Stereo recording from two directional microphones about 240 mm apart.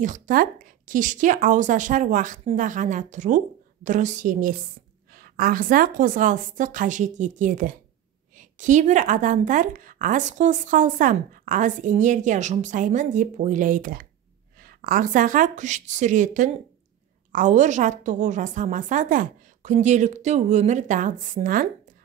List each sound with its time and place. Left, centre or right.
0.0 s a woman's voice: right